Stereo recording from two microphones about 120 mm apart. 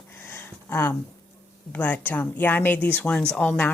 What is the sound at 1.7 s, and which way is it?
Speech, 15° left (ahead or behind).